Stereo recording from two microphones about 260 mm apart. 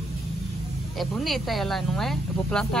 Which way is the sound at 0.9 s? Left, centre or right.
Centre.